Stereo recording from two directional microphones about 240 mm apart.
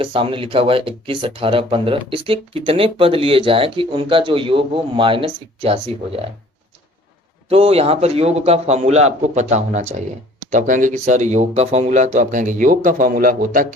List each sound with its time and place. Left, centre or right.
0.0 s speech: right
7.5 s speech: right